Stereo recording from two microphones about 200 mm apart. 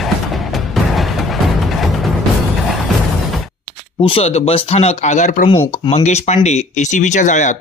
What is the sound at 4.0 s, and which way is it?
Speech, 30° left (ahead or behind).